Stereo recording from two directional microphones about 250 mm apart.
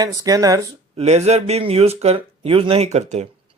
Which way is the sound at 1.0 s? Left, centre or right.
Right.